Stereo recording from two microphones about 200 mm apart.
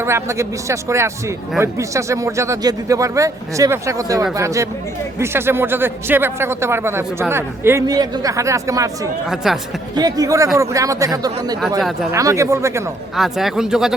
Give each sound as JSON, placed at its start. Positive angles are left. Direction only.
{"t": 0.0, "sound": "speech", "side_deg": -15}
{"t": 9.3, "sound": "speech", "side_deg": 0}
{"t": 9.9, "sound": "speech", "side_deg": -20}
{"t": 13.1, "sound": "speech", "side_deg": 0}